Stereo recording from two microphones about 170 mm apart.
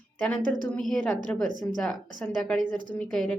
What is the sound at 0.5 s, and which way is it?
A woman's voice, 5° left (ahead or behind).